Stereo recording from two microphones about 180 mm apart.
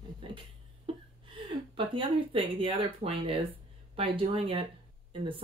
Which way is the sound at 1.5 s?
30° right (ahead or behind).